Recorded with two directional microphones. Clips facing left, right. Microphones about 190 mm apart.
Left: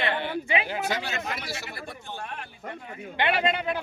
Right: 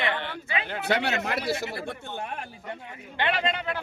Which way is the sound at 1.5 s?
55° right (ahead or behind).